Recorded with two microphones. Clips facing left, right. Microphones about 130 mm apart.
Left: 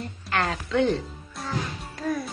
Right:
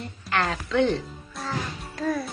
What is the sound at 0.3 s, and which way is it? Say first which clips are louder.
Speech: even; 35° left (ahead or behind).